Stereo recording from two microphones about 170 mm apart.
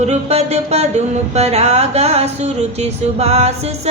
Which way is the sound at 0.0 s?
40° right (ahead or behind).